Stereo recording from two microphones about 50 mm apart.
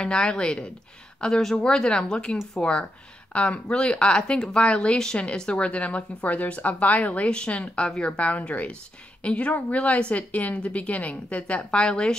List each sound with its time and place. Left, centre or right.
0.0 s a woman's voice: centre
1.2 s a woman's voice: centre